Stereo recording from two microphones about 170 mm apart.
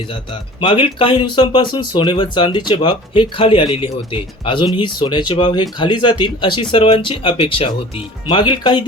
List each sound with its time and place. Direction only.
0.6 s speech: 30° left (ahead or behind)